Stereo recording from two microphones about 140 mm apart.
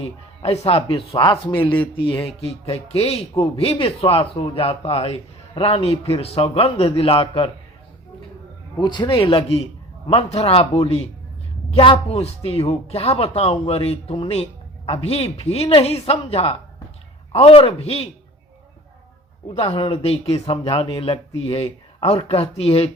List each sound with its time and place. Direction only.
0.0 s a man's voice: 45° left (ahead or behind)
8.8 s a man's voice: 30° left (ahead or behind)
19.5 s a man's voice: 40° left (ahead or behind)